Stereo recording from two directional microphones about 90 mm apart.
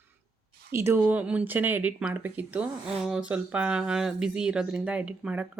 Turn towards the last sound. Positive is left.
turn(degrees=-10)  # may be behind; listen again after turning